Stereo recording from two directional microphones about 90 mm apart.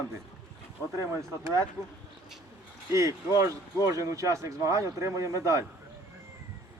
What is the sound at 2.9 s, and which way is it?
Speech, 35° right (ahead or behind).